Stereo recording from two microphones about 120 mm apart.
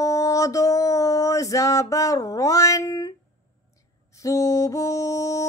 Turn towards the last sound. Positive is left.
turn(degrees=25)  # may be behind; listen again after turning